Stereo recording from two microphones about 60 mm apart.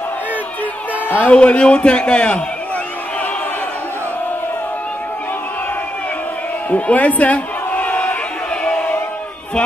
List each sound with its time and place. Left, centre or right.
1.0 s music: left
1.3 s speech: centre
6.7 s a sound: left